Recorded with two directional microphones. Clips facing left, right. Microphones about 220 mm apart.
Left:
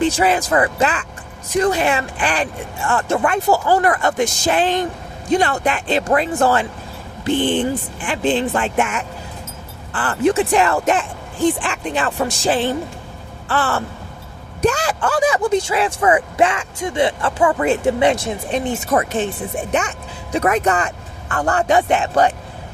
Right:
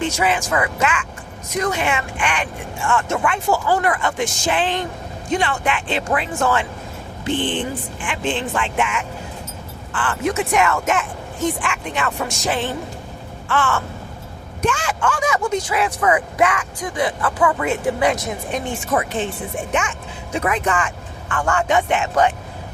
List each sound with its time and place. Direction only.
0.0 s speech: 35° left (ahead or behind)
18.9 s speech: 45° left (ahead or behind)